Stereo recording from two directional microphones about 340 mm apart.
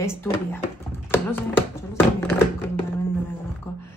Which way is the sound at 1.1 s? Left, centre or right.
Centre.